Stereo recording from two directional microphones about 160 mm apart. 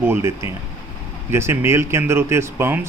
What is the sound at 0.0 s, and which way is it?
Speech, 15° right (ahead or behind).